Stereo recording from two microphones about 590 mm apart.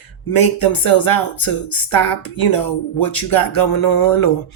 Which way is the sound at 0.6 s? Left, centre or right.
Left.